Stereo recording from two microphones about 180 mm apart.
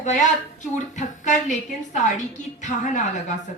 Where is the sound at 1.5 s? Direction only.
40° left (ahead or behind).